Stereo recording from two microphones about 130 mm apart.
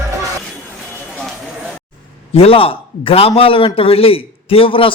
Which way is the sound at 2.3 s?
45° left (ahead or behind).